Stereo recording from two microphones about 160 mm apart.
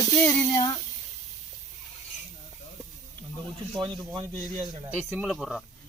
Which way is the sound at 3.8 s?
30° right (ahead or behind).